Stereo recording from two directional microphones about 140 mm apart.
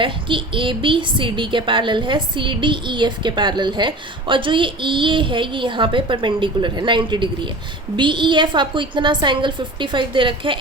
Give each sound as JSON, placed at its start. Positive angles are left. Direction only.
{"t": 0.0, "sound": "a woman's voice", "side_deg": -35}